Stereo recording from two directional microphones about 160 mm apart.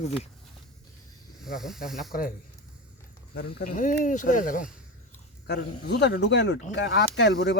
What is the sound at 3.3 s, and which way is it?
Speech, 80° left.